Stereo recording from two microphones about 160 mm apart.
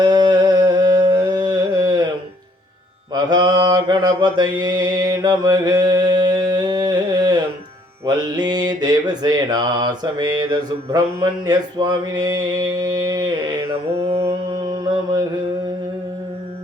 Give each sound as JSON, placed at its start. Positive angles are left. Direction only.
{"t": 0.0, "sound": "carnatic music", "side_deg": -25}
{"t": 3.2, "sound": "mantra", "side_deg": -25}